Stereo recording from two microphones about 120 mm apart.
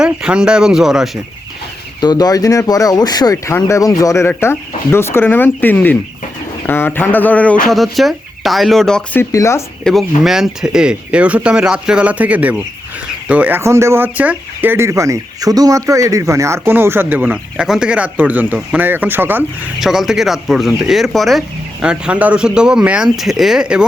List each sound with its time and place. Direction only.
0.0 s speech: 5° right (ahead or behind)
2.0 s speech: 35° left (ahead or behind); by 7.5 s 15° left (ahead or behind)
7.6 s speech: centre (ahead or behind)
9.3 s speech: 25° left (ahead or behind)
9.8 s speech: centre (ahead or behind); by 19.7 s 15° right (ahead or behind)
19.8 s speech: 5° right (ahead or behind)